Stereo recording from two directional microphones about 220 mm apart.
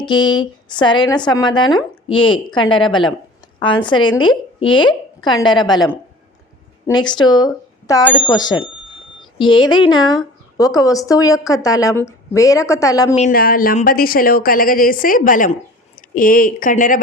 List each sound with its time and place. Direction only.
0.0 s a woman's voice: 20° left (ahead or behind)
13.1 s a woman's voice: 40° left (ahead or behind)